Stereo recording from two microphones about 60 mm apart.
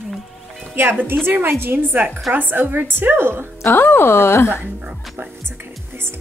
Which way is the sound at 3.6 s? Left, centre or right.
Left.